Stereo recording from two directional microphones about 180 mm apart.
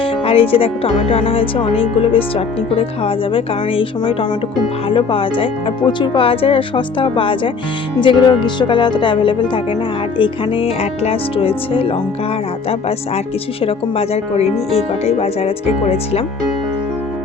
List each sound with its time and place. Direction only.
0.0 s speech: 30° left (ahead or behind)
13.1 s speech: 35° left (ahead or behind)